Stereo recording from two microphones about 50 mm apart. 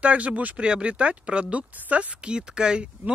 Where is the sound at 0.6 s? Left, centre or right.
Right.